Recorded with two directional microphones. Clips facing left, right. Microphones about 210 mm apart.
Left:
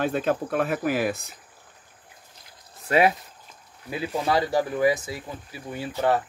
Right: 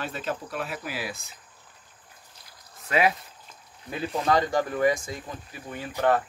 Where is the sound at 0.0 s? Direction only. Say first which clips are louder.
Left 8 dB; 55° left (ahead or behind).